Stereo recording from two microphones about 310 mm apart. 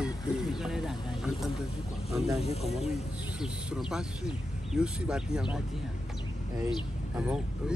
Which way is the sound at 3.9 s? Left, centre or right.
Centre.